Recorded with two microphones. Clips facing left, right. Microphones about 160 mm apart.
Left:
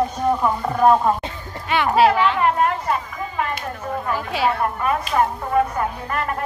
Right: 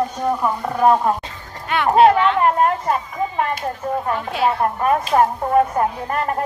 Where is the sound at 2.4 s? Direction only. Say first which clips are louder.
Right 2 dB; 40° right (ahead or behind).